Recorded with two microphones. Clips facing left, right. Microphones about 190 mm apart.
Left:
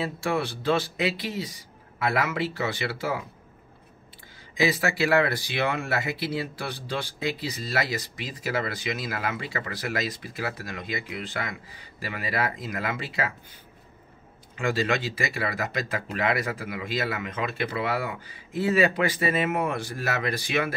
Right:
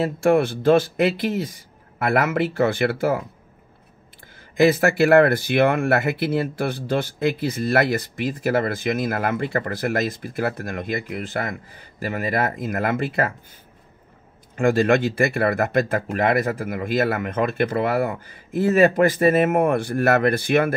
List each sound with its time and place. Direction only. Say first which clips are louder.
0.0 s speech: right 9 dB; 50° right (ahead or behind)
4.6 s speech: right 8 dB; 50° right (ahead or behind)
14.5 s speech: right 8 dB; 50° right (ahead or behind)